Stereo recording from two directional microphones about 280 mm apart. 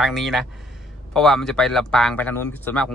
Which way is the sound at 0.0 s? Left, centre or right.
Centre.